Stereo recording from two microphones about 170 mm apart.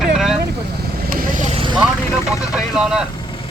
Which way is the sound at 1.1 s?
55° right (ahead or behind).